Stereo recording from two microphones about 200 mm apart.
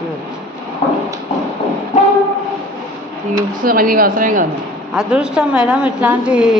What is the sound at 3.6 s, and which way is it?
Speech, 45° right (ahead or behind).